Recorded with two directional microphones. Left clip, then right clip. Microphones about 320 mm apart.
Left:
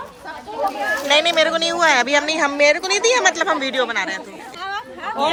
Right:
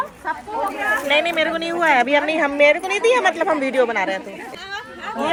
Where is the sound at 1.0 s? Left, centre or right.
Centre.